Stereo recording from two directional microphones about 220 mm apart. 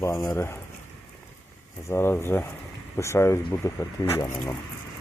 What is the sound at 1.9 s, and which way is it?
Speech, 10° left (ahead or behind).